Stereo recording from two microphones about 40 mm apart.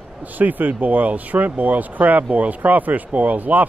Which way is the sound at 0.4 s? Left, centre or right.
Right.